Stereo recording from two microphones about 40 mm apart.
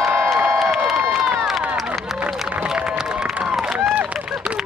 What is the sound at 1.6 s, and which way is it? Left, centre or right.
Run, right.